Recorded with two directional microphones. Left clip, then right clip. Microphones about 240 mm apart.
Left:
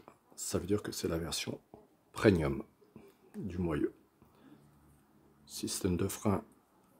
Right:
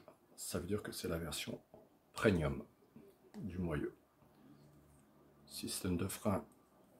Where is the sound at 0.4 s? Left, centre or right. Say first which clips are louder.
Left 7 dB; left.